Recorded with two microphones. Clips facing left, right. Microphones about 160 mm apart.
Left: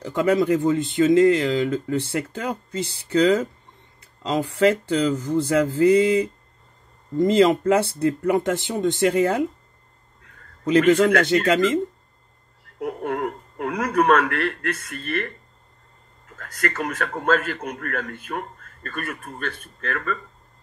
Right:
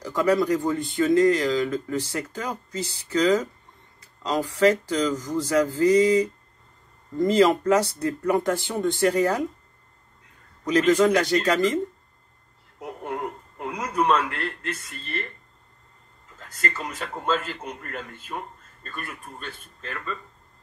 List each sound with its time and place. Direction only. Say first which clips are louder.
0.0 s speech: left 2 dB; 25° left (ahead or behind)
7.2 s speech: left 2 dB; 25° left (ahead or behind)
10.8 s a man's voice: left 2 dB; 60° left (ahead or behind)
12.8 s speech: left 6 dB; 65° left (ahead or behind)
16.3 s a man's voice: left 5 dB; 65° left (ahead or behind)